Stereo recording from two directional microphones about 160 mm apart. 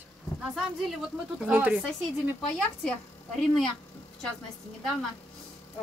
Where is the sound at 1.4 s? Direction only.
10° right (ahead or behind).